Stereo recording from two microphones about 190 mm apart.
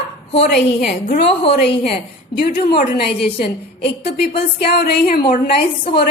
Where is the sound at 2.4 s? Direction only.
50° left (ahead or behind).